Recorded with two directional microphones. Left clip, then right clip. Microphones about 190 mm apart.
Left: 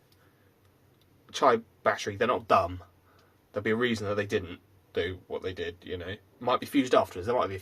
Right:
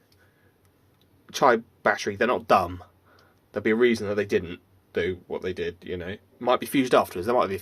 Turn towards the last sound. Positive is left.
turn(degrees=-45)  # may be behind; listen again after turning